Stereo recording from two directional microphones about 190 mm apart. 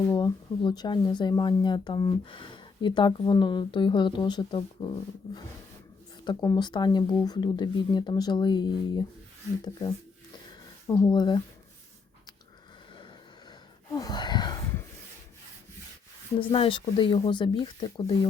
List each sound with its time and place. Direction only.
0.1 s speech: 20° left (ahead or behind)
10.8 s speech: 15° left (ahead or behind)
13.9 s a sound: 20° left (ahead or behind)
16.4 s speech: 30° left (ahead or behind)